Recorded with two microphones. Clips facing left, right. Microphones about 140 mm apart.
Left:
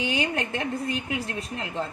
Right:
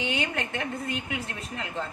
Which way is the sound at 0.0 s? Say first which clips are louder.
Left 3 dB; 35° left (ahead or behind).